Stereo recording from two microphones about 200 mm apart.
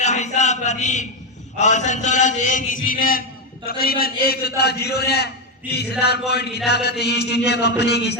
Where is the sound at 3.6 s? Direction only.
50° left (ahead or behind).